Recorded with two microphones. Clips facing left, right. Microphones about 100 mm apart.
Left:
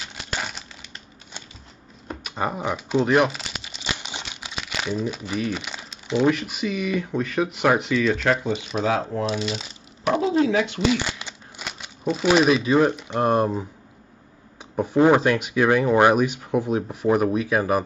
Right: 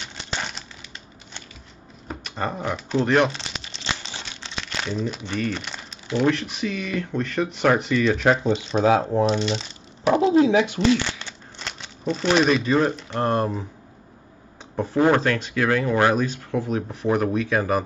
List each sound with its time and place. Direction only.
0.0 s crumpling: 5° left (ahead or behind)
2.0 s crumpling: 10° left (ahead or behind)
6.0 s speech: 10° left (ahead or behind)
8.8 s speech: 25° right (ahead or behind)
9.2 s speech: 5° left (ahead or behind)
10.0 s speech: 25° right (ahead or behind)
10.8 s speech: 15° left (ahead or behind)
14.8 s speech: 15° left (ahead or behind)